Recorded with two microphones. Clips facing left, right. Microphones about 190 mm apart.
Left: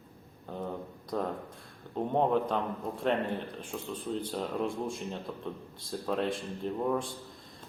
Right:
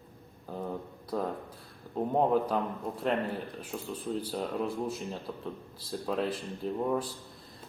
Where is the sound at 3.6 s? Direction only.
5° right (ahead or behind).